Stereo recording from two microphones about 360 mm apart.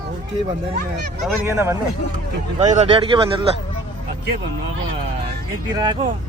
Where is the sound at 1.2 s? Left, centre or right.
Centre.